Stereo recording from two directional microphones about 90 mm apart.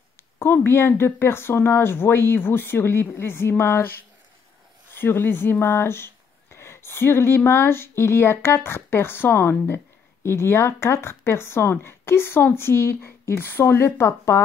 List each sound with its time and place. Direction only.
0.4 s speech: 25° left (ahead or behind)
4.9 s speech: 25° left (ahead or behind)